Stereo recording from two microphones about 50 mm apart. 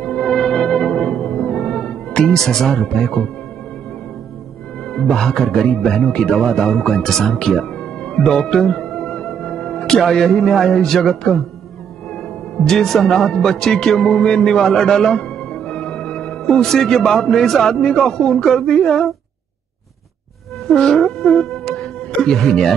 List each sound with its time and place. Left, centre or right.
0.2 s music: centre
2.2 s speech: centre
4.8 s a man's voice: centre
8.8 s music: centre
12.6 s speech: centre
20.6 s music: centre